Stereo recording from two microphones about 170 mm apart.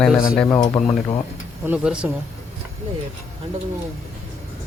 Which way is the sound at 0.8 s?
35° left (ahead or behind).